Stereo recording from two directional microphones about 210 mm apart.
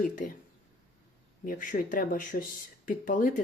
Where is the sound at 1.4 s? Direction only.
40° left (ahead or behind).